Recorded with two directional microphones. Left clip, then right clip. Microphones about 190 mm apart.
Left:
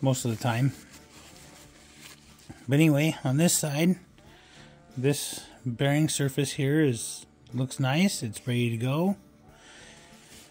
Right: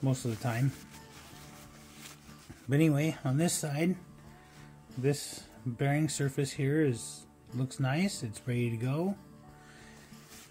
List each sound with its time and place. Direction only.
0.0 s speech: 50° left (ahead or behind)
2.7 s speech: 50° left (ahead or behind)
5.0 s speech: 50° left (ahead or behind)